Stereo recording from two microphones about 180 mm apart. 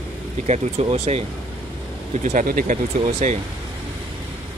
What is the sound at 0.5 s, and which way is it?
Speech, 35° right (ahead or behind).